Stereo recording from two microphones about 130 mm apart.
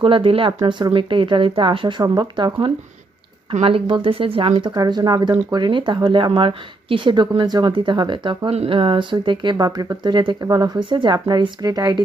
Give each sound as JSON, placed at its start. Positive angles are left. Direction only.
{"t": 0.0, "sound": "speech", "side_deg": -45}
{"t": 3.5, "sound": "speech", "side_deg": -45}
{"t": 4.7, "sound": "speech", "side_deg": -30}